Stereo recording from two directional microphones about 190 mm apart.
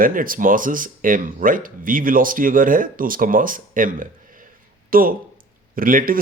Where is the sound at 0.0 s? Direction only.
45° right (ahead or behind).